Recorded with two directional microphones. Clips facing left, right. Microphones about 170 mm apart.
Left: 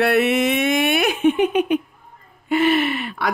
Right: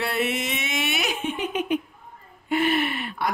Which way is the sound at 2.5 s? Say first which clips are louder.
Left 5 dB; 90° left.